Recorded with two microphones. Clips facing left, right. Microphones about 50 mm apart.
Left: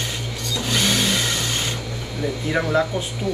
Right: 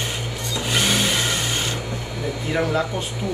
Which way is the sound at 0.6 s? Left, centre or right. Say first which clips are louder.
Even; right.